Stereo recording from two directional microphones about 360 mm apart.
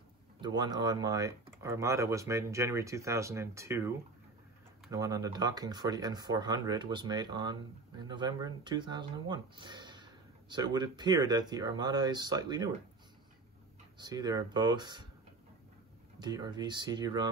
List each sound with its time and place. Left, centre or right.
0.4 s speech: centre
13.9 s speech: centre
16.2 s speech: centre